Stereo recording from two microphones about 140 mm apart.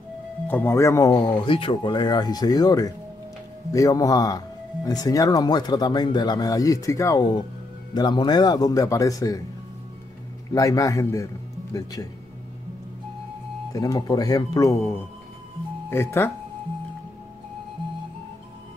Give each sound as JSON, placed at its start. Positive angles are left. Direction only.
{"t": 0.5, "sound": "speech", "side_deg": 15}
{"t": 10.5, "sound": "speech", "side_deg": 25}
{"t": 13.7, "sound": "speech", "side_deg": 25}